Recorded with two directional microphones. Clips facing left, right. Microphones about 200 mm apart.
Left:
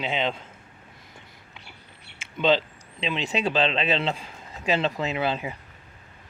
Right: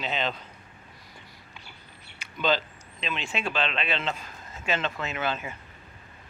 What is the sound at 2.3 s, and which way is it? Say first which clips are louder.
Speech: left 4 dB; 25° left (ahead or behind).